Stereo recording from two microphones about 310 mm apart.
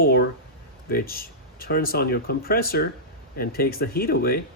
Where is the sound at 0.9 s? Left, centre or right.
Left.